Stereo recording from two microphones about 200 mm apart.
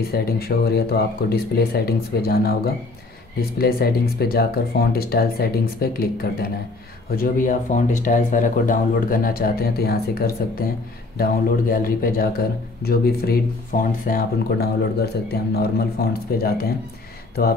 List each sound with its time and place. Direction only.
0.0 s a man's voice: 50° left (ahead or behind)